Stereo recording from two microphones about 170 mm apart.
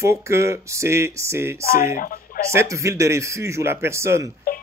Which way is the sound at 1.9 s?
55° left (ahead or behind).